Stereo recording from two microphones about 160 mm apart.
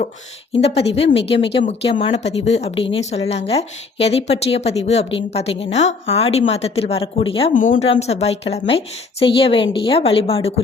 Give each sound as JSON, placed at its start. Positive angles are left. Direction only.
{"t": 0.6, "sound": "speech", "side_deg": 40}
{"t": 7.5, "sound": "speech", "side_deg": 55}
{"t": 7.9, "sound": "speech", "side_deg": 40}